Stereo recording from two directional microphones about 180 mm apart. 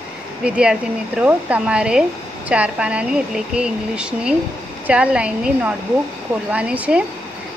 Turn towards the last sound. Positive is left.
turn(degrees=-5)  # may be behind; listen again after turning